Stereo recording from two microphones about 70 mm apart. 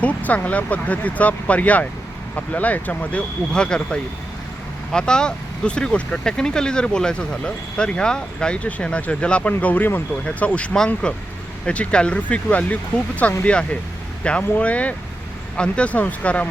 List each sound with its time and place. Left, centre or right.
0.0 s speech: left